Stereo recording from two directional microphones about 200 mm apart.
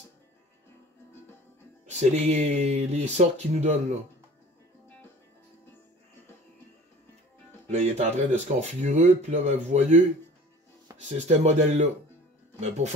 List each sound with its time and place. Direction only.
1.9 s speech: 35° right (ahead or behind)
7.7 s speech: 35° right (ahead or behind)